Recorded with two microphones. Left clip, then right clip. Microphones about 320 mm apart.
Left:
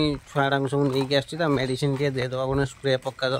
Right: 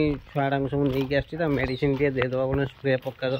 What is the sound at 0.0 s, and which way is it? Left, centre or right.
Speech, centre.